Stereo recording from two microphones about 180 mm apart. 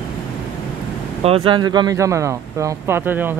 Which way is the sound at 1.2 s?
30° right (ahead or behind).